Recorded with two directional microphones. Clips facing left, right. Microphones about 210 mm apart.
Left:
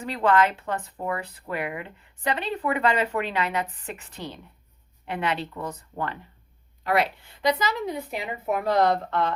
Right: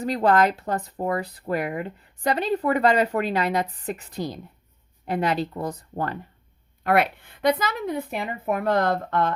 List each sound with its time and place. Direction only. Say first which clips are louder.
0.0 s speech: right 2 dB; 40° right (ahead or behind)
6.8 s a woman's voice: right 3 dB; 55° right (ahead or behind)